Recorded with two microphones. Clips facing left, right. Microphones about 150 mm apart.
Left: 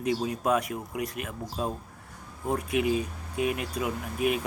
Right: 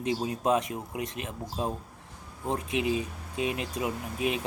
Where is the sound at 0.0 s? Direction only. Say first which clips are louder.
Left 1 dB; 25° right (ahead or behind).